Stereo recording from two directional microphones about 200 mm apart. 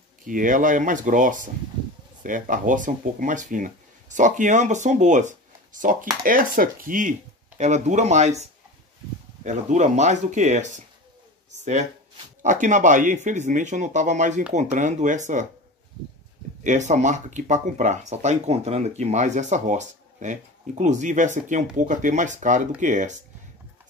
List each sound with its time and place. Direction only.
0.2 s speech: 40° right (ahead or behind)
9.4 s speech: 35° right (ahead or behind)
12.4 s speech: 40° right (ahead or behind)
16.6 s speech: 35° right (ahead or behind)